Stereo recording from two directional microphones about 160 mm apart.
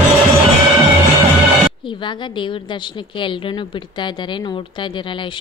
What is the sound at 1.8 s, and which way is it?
A woman's voice, 30° left (ahead or behind).